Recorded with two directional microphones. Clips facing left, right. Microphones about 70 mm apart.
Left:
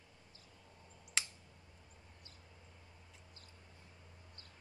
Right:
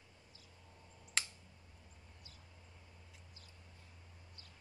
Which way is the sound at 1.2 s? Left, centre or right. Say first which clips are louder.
Even; centre.